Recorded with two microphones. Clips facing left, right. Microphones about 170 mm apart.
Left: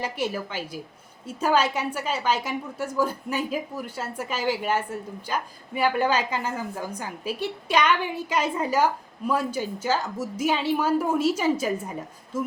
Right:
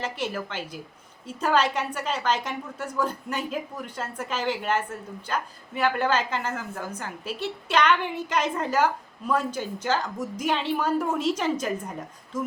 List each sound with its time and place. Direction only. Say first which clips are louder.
0.0 s a woman's voice: left 2 dB; 10° left (ahead or behind)